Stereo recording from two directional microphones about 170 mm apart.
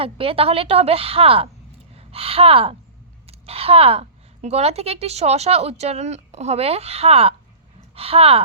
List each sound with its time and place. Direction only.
0.0 s a woman's voice: 35° right (ahead or behind)